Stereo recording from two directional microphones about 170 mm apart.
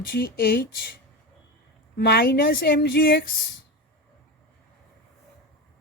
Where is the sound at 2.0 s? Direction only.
70° left (ahead or behind).